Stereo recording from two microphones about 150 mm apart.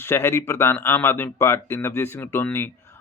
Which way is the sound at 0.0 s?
15° left (ahead or behind).